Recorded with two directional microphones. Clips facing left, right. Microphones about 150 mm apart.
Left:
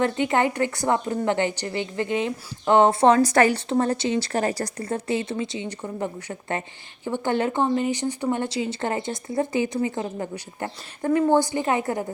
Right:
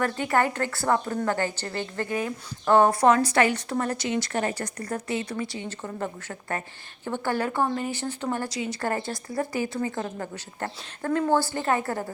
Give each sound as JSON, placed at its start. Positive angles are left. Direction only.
{"t": 0.0, "sound": "speech", "side_deg": 20}
{"t": 3.2, "sound": "a woman's voice", "side_deg": 45}
{"t": 3.7, "sound": "speech", "side_deg": 30}
{"t": 8.9, "sound": "speech", "side_deg": 20}